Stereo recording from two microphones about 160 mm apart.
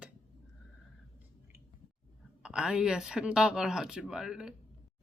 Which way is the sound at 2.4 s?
5° right (ahead or behind).